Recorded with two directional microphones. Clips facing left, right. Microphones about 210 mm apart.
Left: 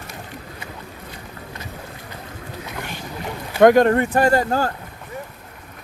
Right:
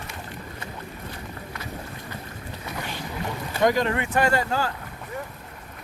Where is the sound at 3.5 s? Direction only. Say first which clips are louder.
Left 10 dB; 55° left (ahead or behind).